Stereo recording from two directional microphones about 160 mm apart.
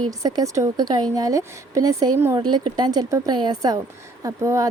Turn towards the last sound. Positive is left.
turn(degrees=-20)  # may be behind; listen again after turning